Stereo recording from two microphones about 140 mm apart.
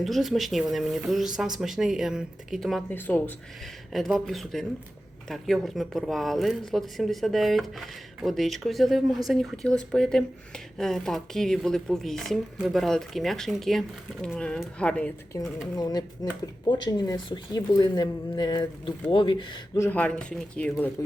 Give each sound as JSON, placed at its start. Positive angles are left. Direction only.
{"t": 0.0, "sound": "speech", "side_deg": 0}
{"t": 2.9, "sound": "speech", "side_deg": 15}
{"t": 3.9, "sound": "speech", "side_deg": 0}
{"t": 15.7, "sound": "a woman's voice", "side_deg": 30}
{"t": 19.7, "sound": "a woman's voice", "side_deg": 20}
{"t": 20.0, "sound": "speech", "side_deg": 5}